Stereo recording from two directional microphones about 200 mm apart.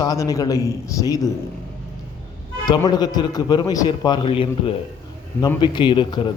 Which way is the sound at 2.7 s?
20° left (ahead or behind).